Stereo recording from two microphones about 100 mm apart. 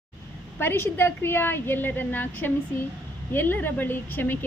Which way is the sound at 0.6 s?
20° left (ahead or behind).